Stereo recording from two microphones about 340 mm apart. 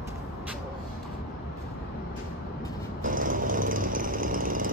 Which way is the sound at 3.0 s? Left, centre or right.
Right.